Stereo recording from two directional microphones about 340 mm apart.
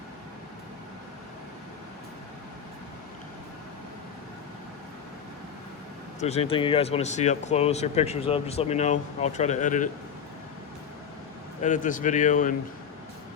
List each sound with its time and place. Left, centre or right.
6.1 s speech: centre
11.6 s speech: left